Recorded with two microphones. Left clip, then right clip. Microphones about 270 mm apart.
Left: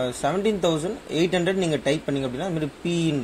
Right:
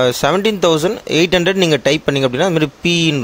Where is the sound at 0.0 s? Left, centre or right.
Right.